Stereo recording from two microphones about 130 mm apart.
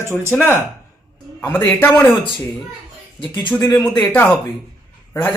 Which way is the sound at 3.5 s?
15° left (ahead or behind).